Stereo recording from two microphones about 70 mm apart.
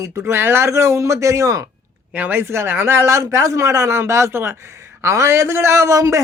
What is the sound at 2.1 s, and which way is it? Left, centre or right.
A man's voice, right.